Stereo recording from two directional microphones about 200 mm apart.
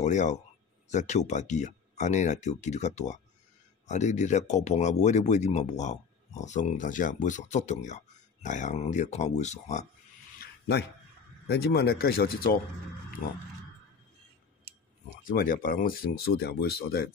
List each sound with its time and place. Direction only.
0.0 s speech: 35° left (ahead or behind)
10.4 s a sound: 55° left (ahead or behind)
11.4 s speech: 55° left (ahead or behind)
15.2 s speech: 45° left (ahead or behind)